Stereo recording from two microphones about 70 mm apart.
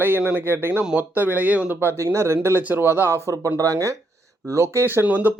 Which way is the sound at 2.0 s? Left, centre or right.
Right.